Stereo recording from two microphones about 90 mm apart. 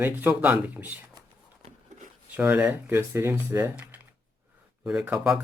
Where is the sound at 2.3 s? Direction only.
15° right (ahead or behind).